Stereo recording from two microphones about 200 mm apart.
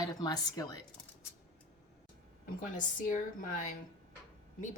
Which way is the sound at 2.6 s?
40° left (ahead or behind).